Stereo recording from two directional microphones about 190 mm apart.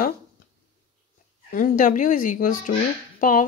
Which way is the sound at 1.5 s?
45° left (ahead or behind).